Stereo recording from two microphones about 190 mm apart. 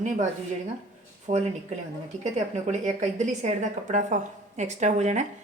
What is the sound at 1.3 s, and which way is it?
A woman's voice, 40° right (ahead or behind).